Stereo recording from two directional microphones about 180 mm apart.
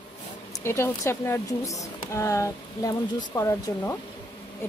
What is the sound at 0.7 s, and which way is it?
A woman's voice, 15° left (ahead or behind).